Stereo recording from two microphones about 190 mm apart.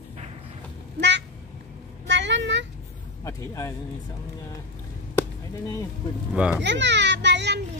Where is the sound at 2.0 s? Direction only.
70° right (ahead or behind).